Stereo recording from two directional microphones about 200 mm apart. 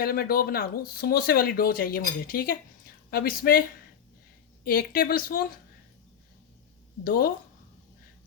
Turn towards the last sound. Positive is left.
turn(degrees=45)  # may be behind; listen again after turning